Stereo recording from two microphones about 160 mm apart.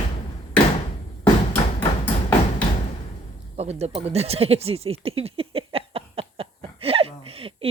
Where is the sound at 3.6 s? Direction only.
40° right (ahead or behind).